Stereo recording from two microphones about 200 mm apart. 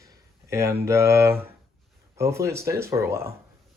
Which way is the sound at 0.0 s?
15° right (ahead or behind).